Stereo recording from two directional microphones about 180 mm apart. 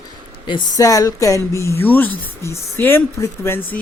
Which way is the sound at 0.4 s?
20° left (ahead or behind).